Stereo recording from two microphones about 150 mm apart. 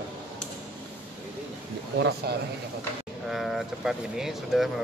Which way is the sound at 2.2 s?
90° right.